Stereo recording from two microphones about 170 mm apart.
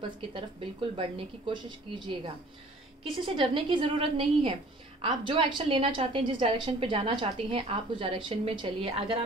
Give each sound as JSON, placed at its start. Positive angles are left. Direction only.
{"t": 0.3, "sound": "a woman's voice", "side_deg": -30}